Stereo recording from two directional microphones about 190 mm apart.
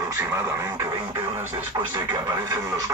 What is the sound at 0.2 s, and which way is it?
Speech, 15° right (ahead or behind).